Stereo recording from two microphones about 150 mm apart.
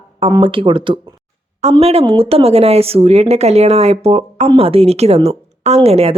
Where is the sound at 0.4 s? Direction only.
35° right (ahead or behind).